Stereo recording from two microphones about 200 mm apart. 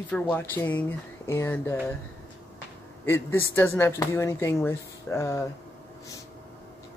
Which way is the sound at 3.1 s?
10° left (ahead or behind).